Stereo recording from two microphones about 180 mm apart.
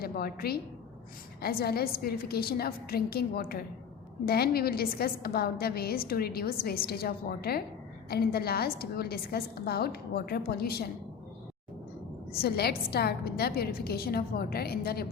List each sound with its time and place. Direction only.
0.0 s a woman's voice: 55° left (ahead or behind)
12.4 s a woman's voice: 60° left (ahead or behind)